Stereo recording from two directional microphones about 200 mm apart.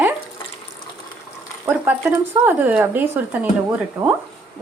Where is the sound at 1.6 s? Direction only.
10° right (ahead or behind).